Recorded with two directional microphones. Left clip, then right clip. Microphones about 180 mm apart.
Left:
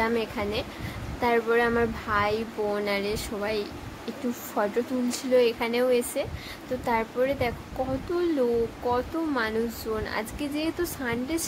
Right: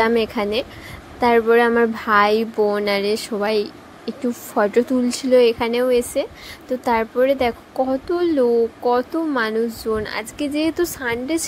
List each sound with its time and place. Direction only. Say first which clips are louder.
0.0 s speech: right 9 dB; 40° right (ahead or behind)